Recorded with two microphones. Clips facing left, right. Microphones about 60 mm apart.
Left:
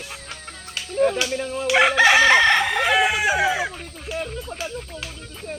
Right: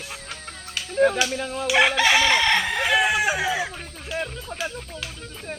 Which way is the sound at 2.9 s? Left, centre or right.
Left.